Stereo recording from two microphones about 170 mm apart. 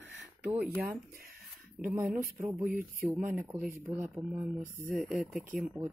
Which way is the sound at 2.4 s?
15° right (ahead or behind).